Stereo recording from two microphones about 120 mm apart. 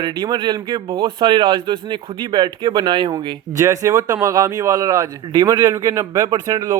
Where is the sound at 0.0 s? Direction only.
35° right (ahead or behind).